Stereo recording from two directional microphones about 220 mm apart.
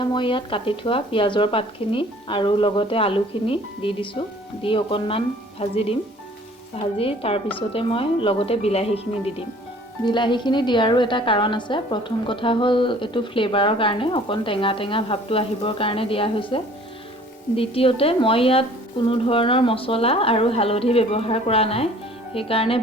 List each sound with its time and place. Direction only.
0.0 s a woman's voice: 20° left (ahead or behind)